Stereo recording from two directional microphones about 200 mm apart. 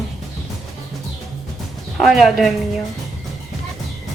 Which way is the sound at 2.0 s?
Centre (ahead or behind).